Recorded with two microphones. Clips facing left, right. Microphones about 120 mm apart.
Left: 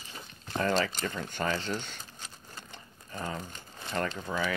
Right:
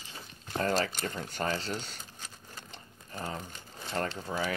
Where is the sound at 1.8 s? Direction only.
40° right (ahead or behind).